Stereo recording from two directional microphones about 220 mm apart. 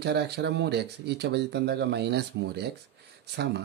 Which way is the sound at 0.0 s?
50° right (ahead or behind).